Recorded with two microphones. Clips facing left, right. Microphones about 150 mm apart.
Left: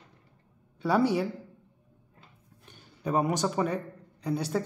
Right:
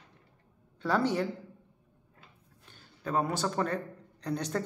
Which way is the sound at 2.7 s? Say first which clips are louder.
Left 4 dB; 15° left (ahead or behind).